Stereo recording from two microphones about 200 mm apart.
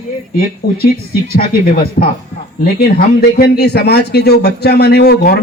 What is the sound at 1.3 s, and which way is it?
Speech, 50° left (ahead or behind).